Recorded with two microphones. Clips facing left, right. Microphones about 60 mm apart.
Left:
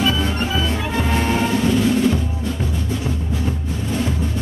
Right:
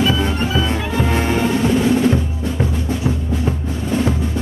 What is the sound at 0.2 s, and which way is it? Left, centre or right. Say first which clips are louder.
Music: right 2 dB; centre.